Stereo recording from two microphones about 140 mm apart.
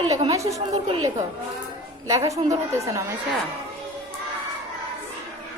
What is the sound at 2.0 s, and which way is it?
Speech, 25° right (ahead or behind).